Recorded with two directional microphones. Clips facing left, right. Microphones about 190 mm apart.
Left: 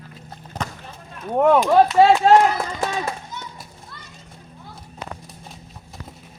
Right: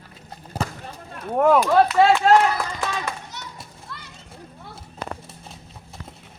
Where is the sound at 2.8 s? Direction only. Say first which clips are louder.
Left 3 dB; 35° left (ahead or behind).